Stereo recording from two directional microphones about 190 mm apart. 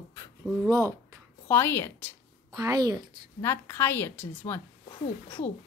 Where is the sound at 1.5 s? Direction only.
10° left (ahead or behind).